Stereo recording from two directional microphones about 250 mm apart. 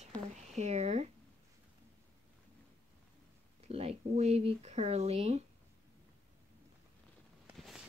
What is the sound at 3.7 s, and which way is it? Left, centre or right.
Speech, right.